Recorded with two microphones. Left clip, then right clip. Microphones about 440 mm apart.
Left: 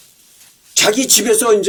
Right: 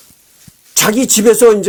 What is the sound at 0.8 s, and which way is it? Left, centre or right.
Speech, right.